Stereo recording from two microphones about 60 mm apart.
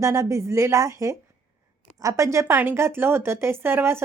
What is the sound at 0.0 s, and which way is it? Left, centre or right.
A woman's voice, right.